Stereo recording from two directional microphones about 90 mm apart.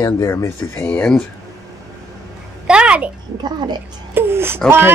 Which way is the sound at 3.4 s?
50° right (ahead or behind).